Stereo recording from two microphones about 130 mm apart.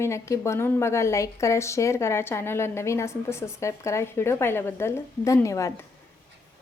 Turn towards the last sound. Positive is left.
turn(degrees=25)  # may be behind; listen again after turning